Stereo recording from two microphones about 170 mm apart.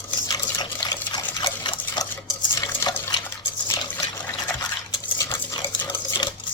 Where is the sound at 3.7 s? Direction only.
25° left (ahead or behind).